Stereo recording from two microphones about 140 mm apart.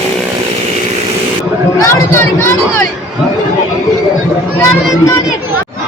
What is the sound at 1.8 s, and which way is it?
Speech, 15° left (ahead or behind).